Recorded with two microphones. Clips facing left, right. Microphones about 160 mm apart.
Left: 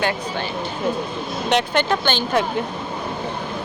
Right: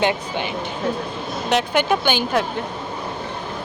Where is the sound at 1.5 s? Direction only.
5° right (ahead or behind).